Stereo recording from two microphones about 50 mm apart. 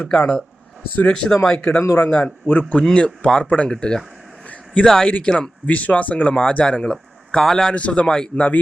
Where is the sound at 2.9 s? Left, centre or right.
Left.